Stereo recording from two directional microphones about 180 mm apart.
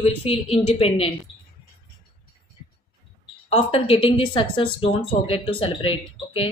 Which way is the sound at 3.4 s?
35° left (ahead or behind).